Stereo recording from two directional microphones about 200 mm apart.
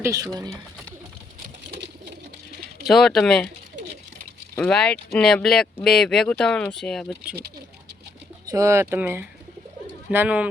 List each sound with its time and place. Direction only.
0.0 s speech: 15° right (ahead or behind)
2.8 s speech: centre (ahead or behind)
4.5 s speech: 5° left (ahead or behind)
8.4 s speech: 15° right (ahead or behind)